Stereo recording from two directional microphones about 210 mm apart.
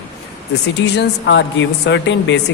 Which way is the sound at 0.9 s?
60° left (ahead or behind).